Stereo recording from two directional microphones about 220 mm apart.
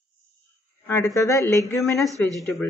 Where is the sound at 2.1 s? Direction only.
15° right (ahead or behind).